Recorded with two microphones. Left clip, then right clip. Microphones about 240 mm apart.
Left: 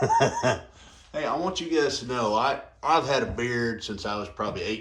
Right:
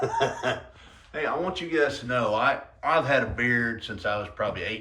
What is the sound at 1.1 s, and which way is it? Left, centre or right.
Speech, centre.